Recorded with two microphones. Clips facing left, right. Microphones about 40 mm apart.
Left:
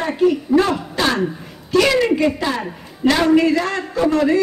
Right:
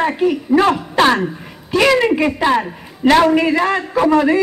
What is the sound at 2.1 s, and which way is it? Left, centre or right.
A man's voice, right.